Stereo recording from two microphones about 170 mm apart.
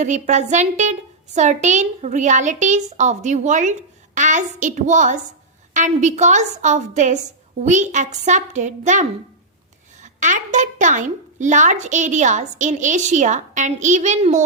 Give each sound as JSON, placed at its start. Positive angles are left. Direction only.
{"t": 0.0, "sound": "a woman's voice", "side_deg": -45}